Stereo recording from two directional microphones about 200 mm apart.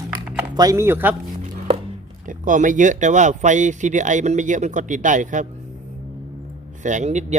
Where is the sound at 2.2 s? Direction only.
40° right (ahead or behind).